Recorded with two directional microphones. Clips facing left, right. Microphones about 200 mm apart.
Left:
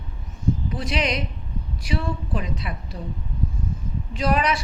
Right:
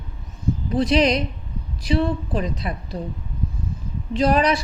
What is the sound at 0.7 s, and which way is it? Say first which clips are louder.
A woman's voice: right 8 dB; 35° right (ahead or behind).